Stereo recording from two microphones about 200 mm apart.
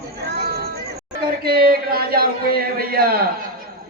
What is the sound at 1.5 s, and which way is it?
A man's voice, 50° right (ahead or behind).